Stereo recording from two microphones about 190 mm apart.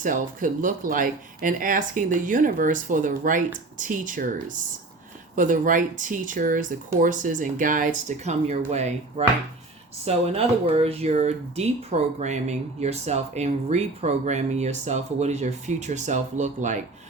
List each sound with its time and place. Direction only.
0.0 s speech: 45° right (ahead or behind)
5.4 s speech: 45° right (ahead or behind)